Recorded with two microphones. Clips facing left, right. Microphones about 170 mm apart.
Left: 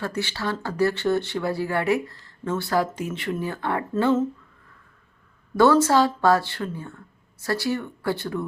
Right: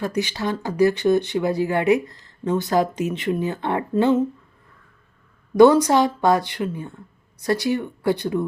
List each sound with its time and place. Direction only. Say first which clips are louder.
0.0 s speech: right 4 dB; 15° right (ahead or behind)
5.5 s speech: right 4 dB; 15° right (ahead or behind)